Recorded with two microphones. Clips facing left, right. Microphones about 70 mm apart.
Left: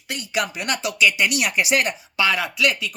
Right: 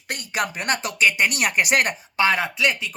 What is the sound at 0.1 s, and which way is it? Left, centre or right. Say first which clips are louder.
Speech: left 1 dB; right.